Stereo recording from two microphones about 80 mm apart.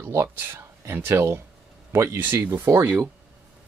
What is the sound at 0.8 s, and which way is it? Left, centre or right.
Speech, right.